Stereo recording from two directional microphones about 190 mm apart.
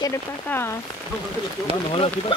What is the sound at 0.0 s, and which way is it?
Speech, 15° left (ahead or behind).